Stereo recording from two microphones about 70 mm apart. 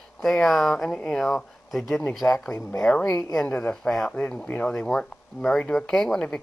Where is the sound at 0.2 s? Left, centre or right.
Centre.